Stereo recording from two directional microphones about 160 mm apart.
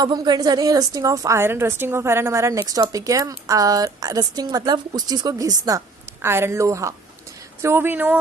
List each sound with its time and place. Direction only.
0.0 s a woman's voice: 25° right (ahead or behind); by 8.2 s 10° right (ahead or behind)